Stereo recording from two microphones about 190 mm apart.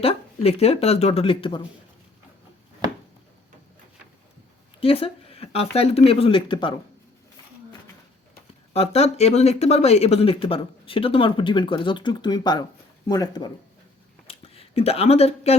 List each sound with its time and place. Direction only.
0.0 s speech: 30° left (ahead or behind)
4.8 s speech: 30° left (ahead or behind)
8.7 s speech: 35° left (ahead or behind)
14.3 s a sound: 30° left (ahead or behind)